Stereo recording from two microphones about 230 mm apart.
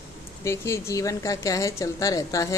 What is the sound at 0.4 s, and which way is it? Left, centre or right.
A woman's voice, centre.